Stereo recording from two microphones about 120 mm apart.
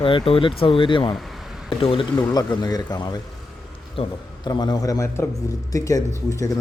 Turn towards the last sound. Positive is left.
turn(degrees=25)  # may be behind; listen again after turning